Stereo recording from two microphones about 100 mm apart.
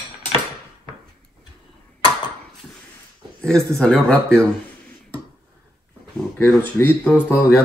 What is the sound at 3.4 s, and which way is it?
Speech, 5° left (ahead or behind).